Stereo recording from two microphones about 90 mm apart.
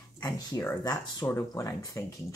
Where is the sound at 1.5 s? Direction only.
40° left (ahead or behind).